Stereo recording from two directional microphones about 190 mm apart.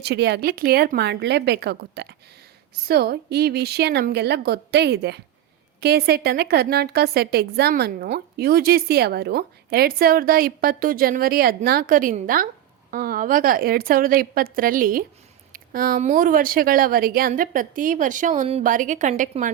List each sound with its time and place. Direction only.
0.0 s a woman's voice: 60° right (ahead or behind); by 19.5 s 40° right (ahead or behind)